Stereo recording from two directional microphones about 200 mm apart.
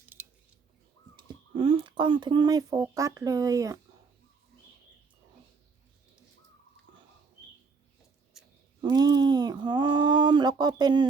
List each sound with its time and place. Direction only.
1.1 s speech: 25° right (ahead or behind)
8.8 s speech: 20° right (ahead or behind)